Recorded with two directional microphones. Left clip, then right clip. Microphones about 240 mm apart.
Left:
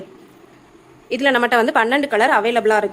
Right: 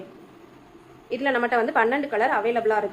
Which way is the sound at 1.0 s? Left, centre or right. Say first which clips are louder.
Left 7 dB; left.